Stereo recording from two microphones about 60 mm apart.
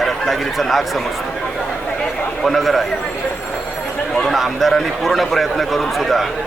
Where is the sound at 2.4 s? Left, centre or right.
Centre.